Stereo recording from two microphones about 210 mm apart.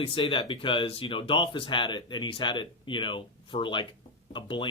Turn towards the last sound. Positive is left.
turn(degrees=25)  # may be behind; listen again after turning